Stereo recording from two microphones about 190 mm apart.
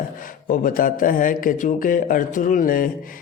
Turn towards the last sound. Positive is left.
turn(degrees=45)  # may be behind; listen again after turning